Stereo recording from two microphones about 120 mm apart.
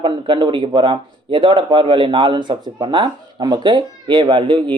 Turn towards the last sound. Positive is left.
turn(degrees=-45)  # may be behind; listen again after turning